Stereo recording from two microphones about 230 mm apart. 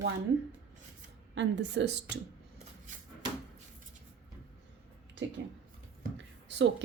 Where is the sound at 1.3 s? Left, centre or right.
Right.